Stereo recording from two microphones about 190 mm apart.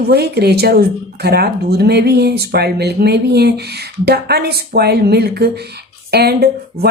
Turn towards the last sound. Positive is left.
turn(degrees=-55)  # may be behind; listen again after turning